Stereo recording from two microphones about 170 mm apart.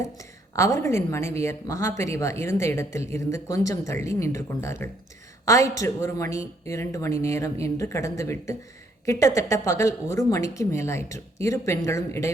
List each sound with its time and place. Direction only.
0.2 s speech: 15° left (ahead or behind)